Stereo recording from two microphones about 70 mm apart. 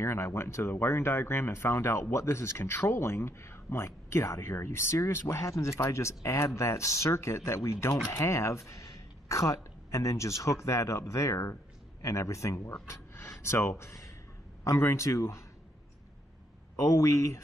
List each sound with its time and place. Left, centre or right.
0.0 s speech: left
16.7 s speech: left